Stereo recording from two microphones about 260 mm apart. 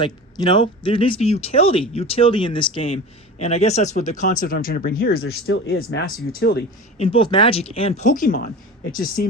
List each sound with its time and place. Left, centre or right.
0.0 s speech: centre; by 6.7 s left
7.0 s speech: centre